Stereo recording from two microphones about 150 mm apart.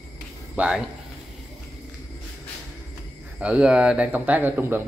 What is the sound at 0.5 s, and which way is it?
Speech, 5° right (ahead or behind).